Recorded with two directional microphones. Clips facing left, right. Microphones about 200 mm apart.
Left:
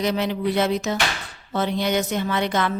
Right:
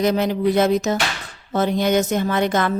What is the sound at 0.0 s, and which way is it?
A woman's voice, 45° right (ahead or behind).